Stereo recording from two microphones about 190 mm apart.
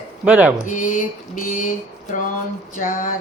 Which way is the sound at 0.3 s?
5° right (ahead or behind).